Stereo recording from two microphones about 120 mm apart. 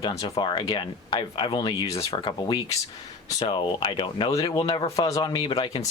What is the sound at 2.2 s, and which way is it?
Speech, 40° left (ahead or behind).